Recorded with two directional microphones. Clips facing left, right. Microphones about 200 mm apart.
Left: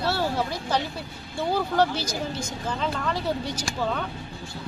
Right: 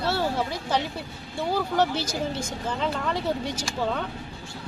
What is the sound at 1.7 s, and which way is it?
Speech, 25° right (ahead or behind).